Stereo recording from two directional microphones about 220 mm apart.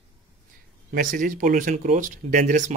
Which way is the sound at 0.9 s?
40° right (ahead or behind).